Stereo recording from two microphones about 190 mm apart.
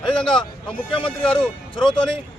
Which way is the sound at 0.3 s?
25° left (ahead or behind).